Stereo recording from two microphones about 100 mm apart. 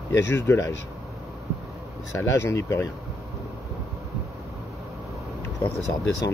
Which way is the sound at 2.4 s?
30° left (ahead or behind).